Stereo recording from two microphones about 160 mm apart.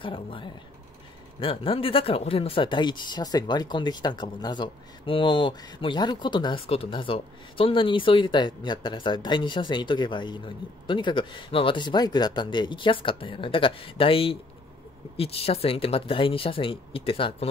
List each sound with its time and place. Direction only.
0.0 s speech: 30° left (ahead or behind)